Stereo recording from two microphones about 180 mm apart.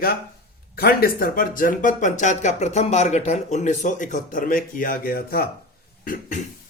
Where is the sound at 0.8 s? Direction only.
55° left (ahead or behind).